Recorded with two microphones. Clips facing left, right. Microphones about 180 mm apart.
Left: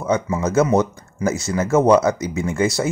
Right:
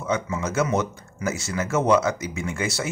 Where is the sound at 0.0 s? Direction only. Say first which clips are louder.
Left 6 dB; 40° left (ahead or behind).